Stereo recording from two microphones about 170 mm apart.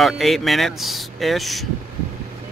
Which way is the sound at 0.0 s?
Centre (ahead or behind).